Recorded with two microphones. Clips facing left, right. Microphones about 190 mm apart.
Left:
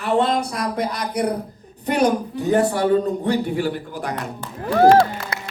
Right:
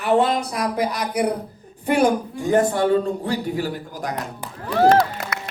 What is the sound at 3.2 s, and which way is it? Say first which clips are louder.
Speech: left 3 dB; 40° right (ahead or behind).